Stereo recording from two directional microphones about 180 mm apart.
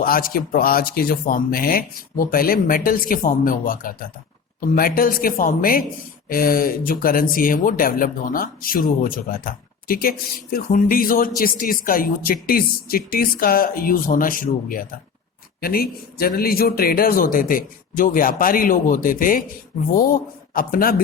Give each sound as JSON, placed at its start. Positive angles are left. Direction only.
{"t": 0.0, "sound": "speech", "side_deg": 55}